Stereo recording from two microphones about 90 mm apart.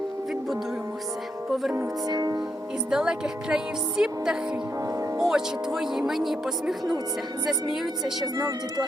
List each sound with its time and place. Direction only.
2.0 s speech: 45° right (ahead or behind)
2.9 s speech: 5° right (ahead or behind)
8.4 s speech: 40° right (ahead or behind)